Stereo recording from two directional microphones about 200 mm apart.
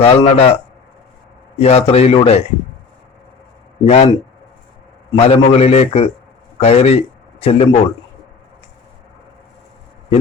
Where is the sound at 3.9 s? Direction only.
30° left (ahead or behind).